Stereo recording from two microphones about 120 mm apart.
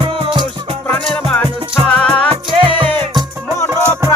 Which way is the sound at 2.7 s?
45° right (ahead or behind).